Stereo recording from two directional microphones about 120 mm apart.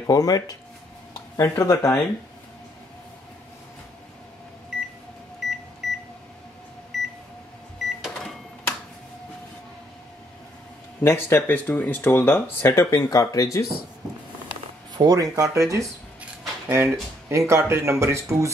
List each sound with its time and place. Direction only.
0.0 s speech: 30° left (ahead or behind)
1.6 s speech: 25° left (ahead or behind)
5.4 s microwave oven: centre (ahead or behind)
11.0 s speech: 20° left (ahead or behind)
15.0 s speech: 30° right (ahead or behind)